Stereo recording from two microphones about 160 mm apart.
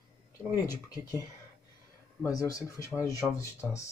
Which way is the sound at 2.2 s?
20° left (ahead or behind).